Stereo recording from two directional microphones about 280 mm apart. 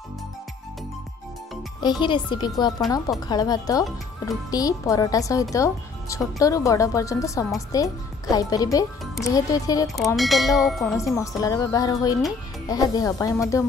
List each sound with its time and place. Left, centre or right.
1.8 s speech: centre
10.1 s speech: centre